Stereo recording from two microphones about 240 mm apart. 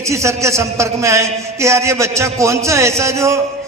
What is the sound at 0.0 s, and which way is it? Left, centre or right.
A man's voice, centre.